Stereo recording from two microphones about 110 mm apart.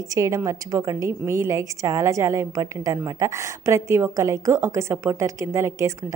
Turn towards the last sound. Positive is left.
turn(degrees=-25)  # may be behind; listen again after turning